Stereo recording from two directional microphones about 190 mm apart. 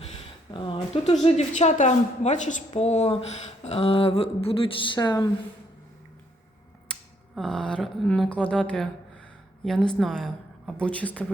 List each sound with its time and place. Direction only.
0.5 s a sound: 25° left (ahead or behind)
1.2 s a woman's voice: 35° left (ahead or behind)
7.3 s speech: 5° left (ahead or behind)